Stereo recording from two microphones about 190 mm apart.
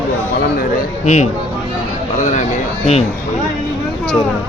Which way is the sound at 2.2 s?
40° left (ahead or behind).